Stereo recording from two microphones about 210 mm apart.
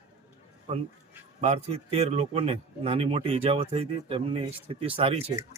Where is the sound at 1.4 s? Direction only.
30° right (ahead or behind).